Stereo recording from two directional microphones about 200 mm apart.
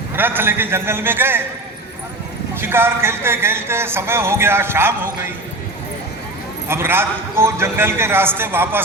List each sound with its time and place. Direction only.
0.2 s speech: 10° right (ahead or behind)
2.6 s speech: 10° right (ahead or behind)
6.7 s speech: 10° right (ahead or behind)